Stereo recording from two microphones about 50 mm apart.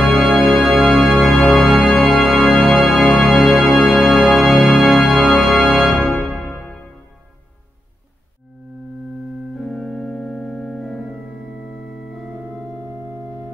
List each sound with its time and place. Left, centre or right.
0.0 s organ: centre
6.3 s music: centre
9.6 s organ: centre